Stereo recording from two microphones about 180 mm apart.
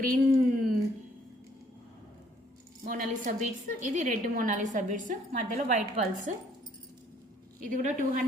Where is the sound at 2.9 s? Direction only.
50° right (ahead or behind).